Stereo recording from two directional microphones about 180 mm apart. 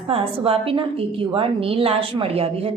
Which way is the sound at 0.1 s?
30° right (ahead or behind).